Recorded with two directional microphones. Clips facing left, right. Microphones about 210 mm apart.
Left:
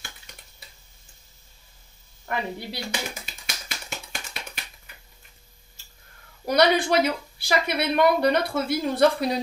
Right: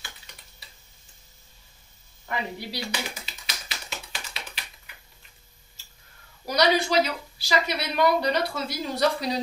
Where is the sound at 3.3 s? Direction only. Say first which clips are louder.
Left 1 dB; 50° left (ahead or behind).